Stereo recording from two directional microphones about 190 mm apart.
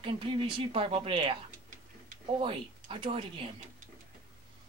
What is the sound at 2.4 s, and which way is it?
Speech, 25° right (ahead or behind).